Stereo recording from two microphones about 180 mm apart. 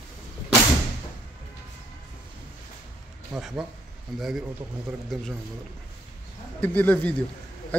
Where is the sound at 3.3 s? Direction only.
5° right (ahead or behind).